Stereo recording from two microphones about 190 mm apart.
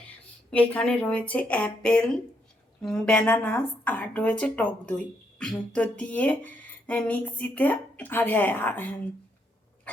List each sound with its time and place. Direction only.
0.5 s a woman's voice: 10° left (ahead or behind)